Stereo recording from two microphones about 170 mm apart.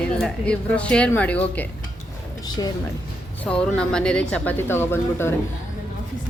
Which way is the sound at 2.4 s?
25° left (ahead or behind).